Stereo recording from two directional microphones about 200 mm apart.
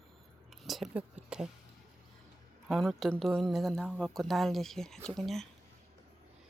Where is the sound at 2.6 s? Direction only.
Centre (ahead or behind).